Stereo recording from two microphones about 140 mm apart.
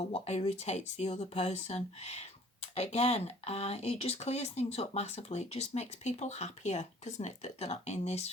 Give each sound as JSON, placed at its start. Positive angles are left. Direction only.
{"t": 0.0, "sound": "speech", "side_deg": 50}